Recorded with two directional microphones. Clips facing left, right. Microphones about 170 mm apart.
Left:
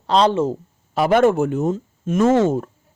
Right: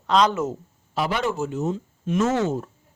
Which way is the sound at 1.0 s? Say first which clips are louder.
Left 9 dB; 50° left (ahead or behind).